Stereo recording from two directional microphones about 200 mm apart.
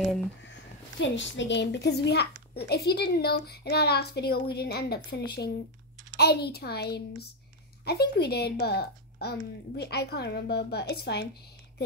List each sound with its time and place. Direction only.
0.0 s speech: centre (ahead or behind)
0.4 s a child's voice: 65° left (ahead or behind)